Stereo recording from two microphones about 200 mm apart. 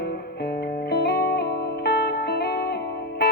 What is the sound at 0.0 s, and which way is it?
Music, 55° left (ahead or behind).